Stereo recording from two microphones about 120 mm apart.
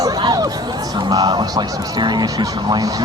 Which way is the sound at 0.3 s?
30° right (ahead or behind).